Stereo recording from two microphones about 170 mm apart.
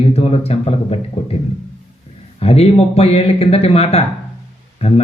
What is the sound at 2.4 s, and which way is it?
A man's voice, 35° left (ahead or behind).